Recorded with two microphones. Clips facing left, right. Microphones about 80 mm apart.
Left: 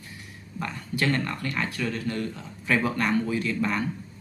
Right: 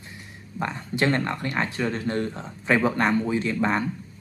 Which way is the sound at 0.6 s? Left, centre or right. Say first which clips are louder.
Right 4 dB; right.